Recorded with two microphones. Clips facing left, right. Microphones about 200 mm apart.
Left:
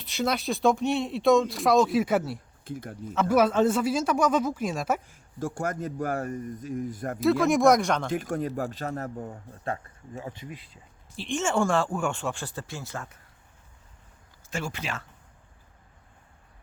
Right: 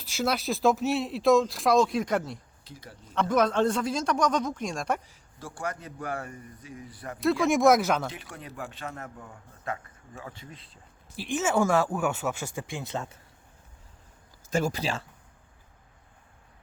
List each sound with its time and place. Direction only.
0.0 s speech: centre (ahead or behind)
2.6 s speech: 50° left (ahead or behind)
3.0 s a man's voice: 10° left (ahead or behind)
5.0 s a man's voice: 45° left (ahead or behind)
7.2 s speech: centre (ahead or behind)
8.1 s a man's voice: 45° left (ahead or behind)
10.2 s a man's voice: 20° left (ahead or behind)
11.2 s speech: 5° right (ahead or behind); by 13.1 s 20° right (ahead or behind)
14.5 s speech: 40° right (ahead or behind)